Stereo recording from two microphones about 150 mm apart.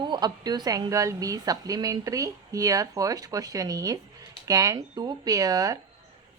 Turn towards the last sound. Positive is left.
turn(degrees=-25)  # may be behind; listen again after turning